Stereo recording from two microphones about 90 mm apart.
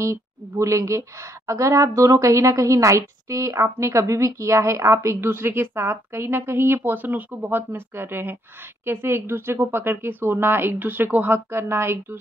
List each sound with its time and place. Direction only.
0.0 s a woman's voice: 35° right (ahead or behind)